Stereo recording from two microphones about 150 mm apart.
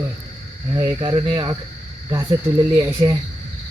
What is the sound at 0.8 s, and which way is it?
Speech, 25° right (ahead or behind).